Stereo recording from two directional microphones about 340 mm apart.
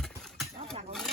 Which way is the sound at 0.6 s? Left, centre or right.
Centre.